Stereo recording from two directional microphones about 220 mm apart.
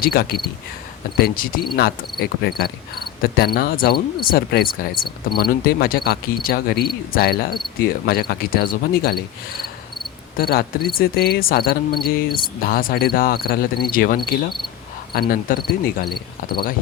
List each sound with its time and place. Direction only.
0.0 s speech: 45° left (ahead or behind)
10.3 s speech: 45° left (ahead or behind)